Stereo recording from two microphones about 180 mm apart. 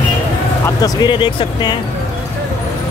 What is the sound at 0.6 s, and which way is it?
Speech, 20° left (ahead or behind).